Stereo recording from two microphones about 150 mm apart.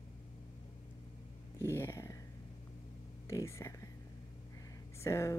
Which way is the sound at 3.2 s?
20° left (ahead or behind).